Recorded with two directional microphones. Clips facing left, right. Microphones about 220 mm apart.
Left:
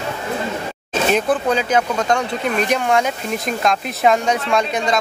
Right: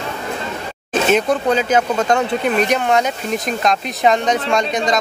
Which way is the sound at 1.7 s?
25° right (ahead or behind).